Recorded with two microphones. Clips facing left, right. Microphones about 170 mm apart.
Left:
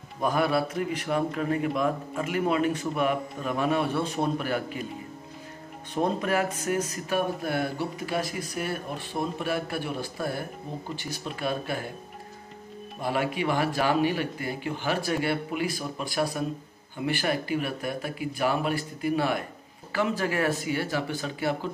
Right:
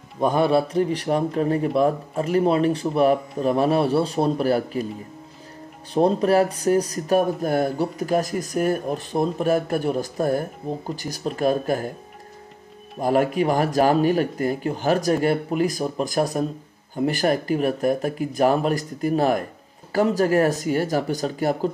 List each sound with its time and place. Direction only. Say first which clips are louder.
0.2 s a man's voice: right 6 dB; 25° right (ahead or behind)
5.9 s a man's voice: right 8 dB; 35° right (ahead or behind)
13.0 s a man's voice: right 8 dB; 45° right (ahead or behind)